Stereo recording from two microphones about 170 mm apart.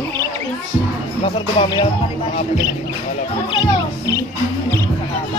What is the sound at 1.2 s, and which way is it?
Speech, 25° left (ahead or behind).